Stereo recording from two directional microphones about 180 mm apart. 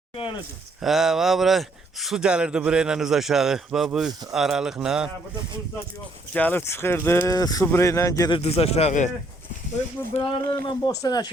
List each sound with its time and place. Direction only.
0.8 s speech: centre (ahead or behind)
6.3 s speech: 10° left (ahead or behind)
8.4 s speech: 35° left (ahead or behind)
10.2 s speech: 15° left (ahead or behind)